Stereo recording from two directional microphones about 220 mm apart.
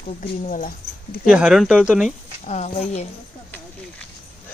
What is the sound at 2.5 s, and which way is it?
Speech, 30° left (ahead or behind).